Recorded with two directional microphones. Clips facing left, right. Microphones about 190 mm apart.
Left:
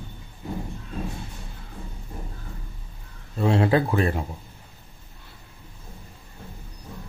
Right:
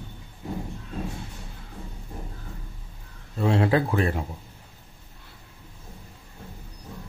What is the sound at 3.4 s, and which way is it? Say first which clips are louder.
Speech: left 1 dB; 30° left (ahead or behind).